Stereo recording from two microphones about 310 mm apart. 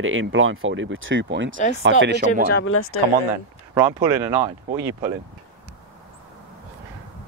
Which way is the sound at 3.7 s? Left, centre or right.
Centre.